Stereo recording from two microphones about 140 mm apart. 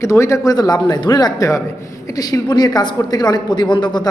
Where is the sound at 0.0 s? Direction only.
20° left (ahead or behind).